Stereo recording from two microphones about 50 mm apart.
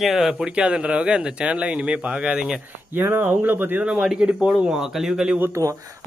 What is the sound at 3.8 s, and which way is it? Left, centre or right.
Speech, right.